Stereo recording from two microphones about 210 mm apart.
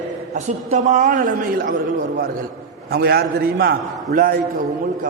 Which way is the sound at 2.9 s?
50° right (ahead or behind).